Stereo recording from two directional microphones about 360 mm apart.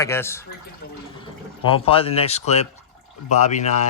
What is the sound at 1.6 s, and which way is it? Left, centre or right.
Speech, centre.